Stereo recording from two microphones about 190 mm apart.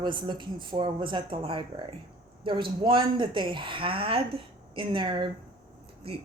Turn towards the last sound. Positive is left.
turn(degrees=-30)  # may be behind; listen again after turning